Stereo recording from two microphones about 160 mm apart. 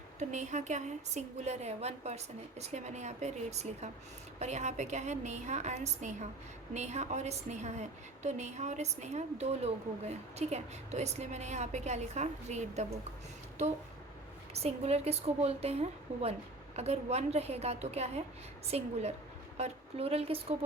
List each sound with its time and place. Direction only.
0.2 s a woman's voice: 50° right (ahead or behind)
14.5 s a woman's voice: 40° right (ahead or behind)